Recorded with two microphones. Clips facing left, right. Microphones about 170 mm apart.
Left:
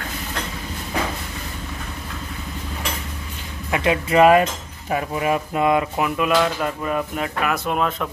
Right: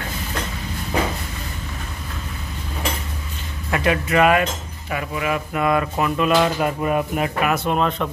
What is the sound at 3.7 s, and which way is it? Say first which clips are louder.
Speech: left 1 dB; 20° left (ahead or behind).